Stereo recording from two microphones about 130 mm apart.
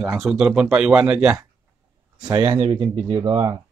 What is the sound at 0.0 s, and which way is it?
Speech, centre (ahead or behind).